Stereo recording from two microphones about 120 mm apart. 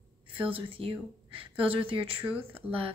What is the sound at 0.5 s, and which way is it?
Speech, 50° right (ahead or behind).